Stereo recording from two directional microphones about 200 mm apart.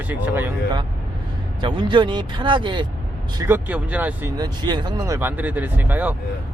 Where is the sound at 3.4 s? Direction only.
10° right (ahead or behind).